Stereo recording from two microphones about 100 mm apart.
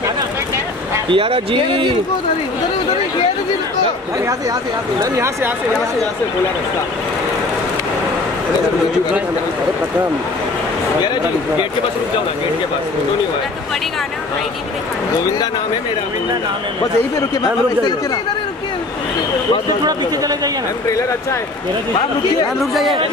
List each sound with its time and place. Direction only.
1.1 s speech: 70° right (ahead or behind)
5.1 s speech: 25° right (ahead or behind)
19.8 s a man's voice: 40° right (ahead or behind)
22.6 s speech: centre (ahead or behind)